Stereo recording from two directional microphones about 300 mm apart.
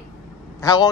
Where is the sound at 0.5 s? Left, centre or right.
Centre.